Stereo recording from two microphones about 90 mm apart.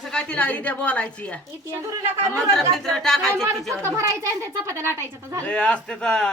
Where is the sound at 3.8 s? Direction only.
30° right (ahead or behind).